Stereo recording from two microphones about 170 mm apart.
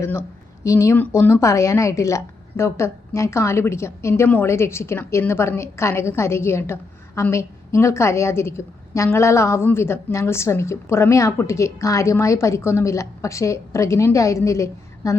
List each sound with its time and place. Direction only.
0.0 s a woman's voice: 15° left (ahead or behind)